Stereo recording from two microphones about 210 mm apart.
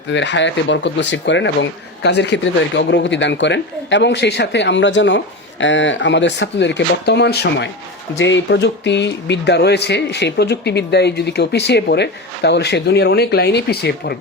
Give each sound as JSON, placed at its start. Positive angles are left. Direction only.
{"t": 0.1, "sound": "speech", "side_deg": 60}